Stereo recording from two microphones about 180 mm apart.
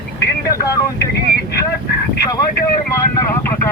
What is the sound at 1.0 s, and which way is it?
Speech, 65° left (ahead or behind).